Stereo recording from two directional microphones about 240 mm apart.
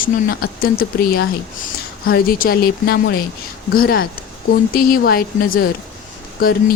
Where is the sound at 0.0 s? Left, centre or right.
Left.